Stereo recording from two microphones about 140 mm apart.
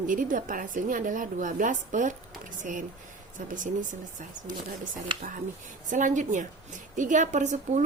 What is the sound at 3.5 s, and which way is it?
A woman's voice, 70° right (ahead or behind).